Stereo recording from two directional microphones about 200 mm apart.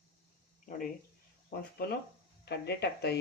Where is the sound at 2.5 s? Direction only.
55° left (ahead or behind).